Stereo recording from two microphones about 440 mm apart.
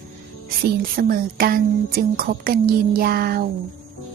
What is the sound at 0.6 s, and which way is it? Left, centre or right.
Speech, right.